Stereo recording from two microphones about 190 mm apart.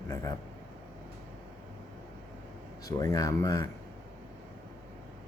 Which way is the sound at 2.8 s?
20° left (ahead or behind).